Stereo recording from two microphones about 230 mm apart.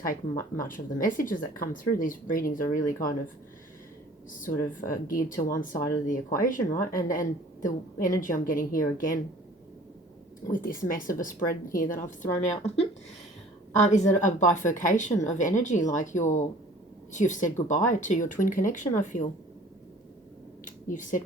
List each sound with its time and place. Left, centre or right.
0.1 s speech: left
4.3 s speech: left
10.5 s speech: left
13.9 s speech: left
20.7 s a sound: left